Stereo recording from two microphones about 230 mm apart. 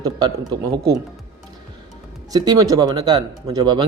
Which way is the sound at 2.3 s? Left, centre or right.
Centre.